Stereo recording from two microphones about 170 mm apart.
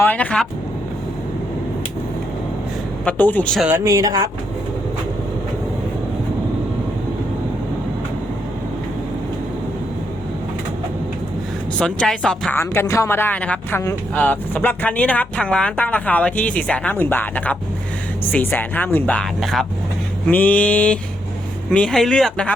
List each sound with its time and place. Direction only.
0.0 s speech: 10° left (ahead or behind)
3.0 s speech: 10° left (ahead or behind)
3.7 s speech: 15° right (ahead or behind)
11.8 s speech: 5° left (ahead or behind)